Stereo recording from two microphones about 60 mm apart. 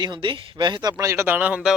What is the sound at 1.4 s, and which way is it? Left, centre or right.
Speech, right.